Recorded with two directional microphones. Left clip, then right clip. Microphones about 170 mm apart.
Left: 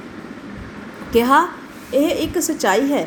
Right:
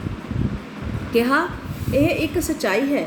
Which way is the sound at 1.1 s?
35° left (ahead or behind).